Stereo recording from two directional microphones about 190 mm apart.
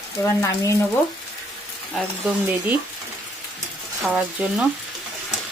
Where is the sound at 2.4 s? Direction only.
10° right (ahead or behind).